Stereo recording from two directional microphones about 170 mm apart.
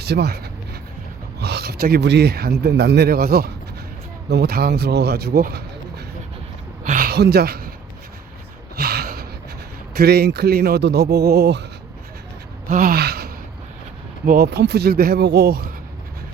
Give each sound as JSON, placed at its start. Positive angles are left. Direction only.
{"t": 0.0, "sound": "speech", "side_deg": -75}
{"t": 6.8, "sound": "a sound", "side_deg": -55}
{"t": 8.7, "sound": "gasp", "side_deg": -65}
{"t": 10.0, "sound": "speech", "side_deg": -70}
{"t": 12.6, "sound": "gasp", "side_deg": -50}
{"t": 14.3, "sound": "speech", "side_deg": -70}